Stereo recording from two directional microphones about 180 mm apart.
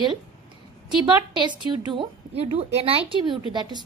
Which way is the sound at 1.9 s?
30° right (ahead or behind).